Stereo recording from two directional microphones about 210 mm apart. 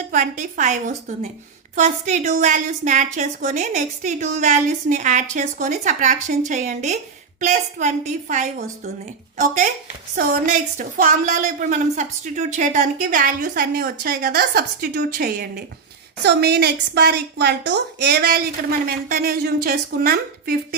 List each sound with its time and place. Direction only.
0.1 s a woman's voice: 40° right (ahead or behind)
10.2 s a woman's voice: 40° right (ahead or behind)